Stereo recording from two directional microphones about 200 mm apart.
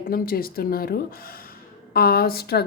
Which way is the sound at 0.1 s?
45° left (ahead or behind).